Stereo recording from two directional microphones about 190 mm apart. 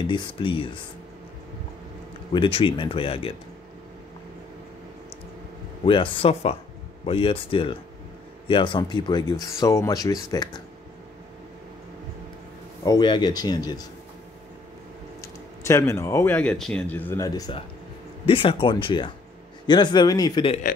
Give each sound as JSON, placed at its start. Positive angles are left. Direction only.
{"t": 0.0, "sound": "speech", "side_deg": 25}
{"t": 2.3, "sound": "speech", "side_deg": 25}
{"t": 5.9, "sound": "speech", "side_deg": 30}
{"t": 12.8, "sound": "speech", "side_deg": 20}
{"t": 15.6, "sound": "speech", "side_deg": 15}